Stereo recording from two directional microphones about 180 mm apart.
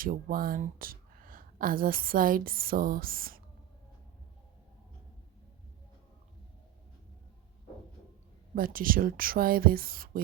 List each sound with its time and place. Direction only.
0.0 s speech: 50° right (ahead or behind)
8.5 s speech: 50° right (ahead or behind)